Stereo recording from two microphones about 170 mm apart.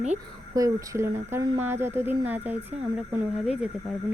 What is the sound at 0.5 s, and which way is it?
Speech, 20° right (ahead or behind).